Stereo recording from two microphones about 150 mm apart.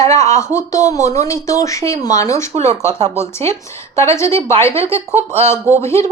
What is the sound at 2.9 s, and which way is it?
Speech, 45° right (ahead or behind).